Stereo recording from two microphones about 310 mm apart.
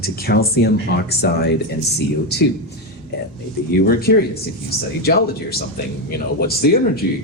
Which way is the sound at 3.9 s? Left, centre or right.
Left.